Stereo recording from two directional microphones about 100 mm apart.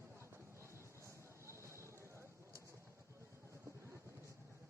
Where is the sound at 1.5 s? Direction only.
30° right (ahead or behind).